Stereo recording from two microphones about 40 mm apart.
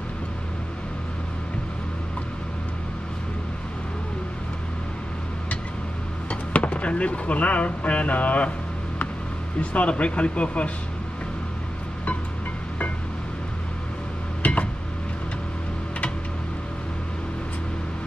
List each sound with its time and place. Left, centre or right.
6.5 s speech: left
9.6 s speech: left
14.4 s a sound: left